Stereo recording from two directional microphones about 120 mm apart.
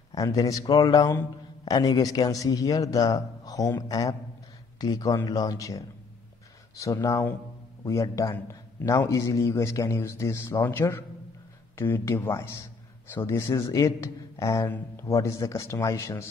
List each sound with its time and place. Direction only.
0.1 s a man's voice: 30° left (ahead or behind)